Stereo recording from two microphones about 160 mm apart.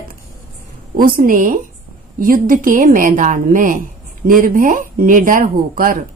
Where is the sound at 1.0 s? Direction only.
60° right (ahead or behind).